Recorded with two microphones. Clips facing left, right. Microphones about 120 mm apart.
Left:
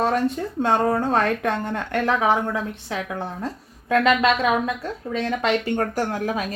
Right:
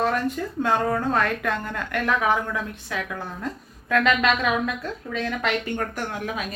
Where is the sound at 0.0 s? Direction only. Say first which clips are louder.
Left 2 dB; 30° left (ahead or behind).